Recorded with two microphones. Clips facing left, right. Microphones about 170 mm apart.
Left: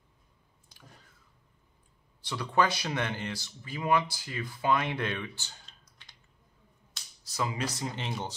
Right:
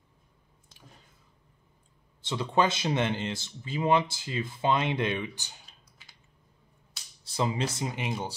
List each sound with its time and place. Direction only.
2.2 s speech: 25° right (ahead or behind)
6.0 s typing: 5° right (ahead or behind)
7.2 s speech: 25° right (ahead or behind)
7.9 s speech: 15° right (ahead or behind)